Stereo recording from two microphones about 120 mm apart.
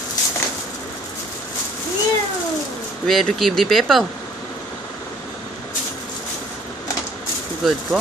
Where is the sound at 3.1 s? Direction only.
Centre (ahead or behind).